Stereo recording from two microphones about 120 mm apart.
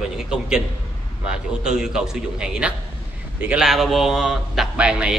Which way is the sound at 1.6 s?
5° right (ahead or behind).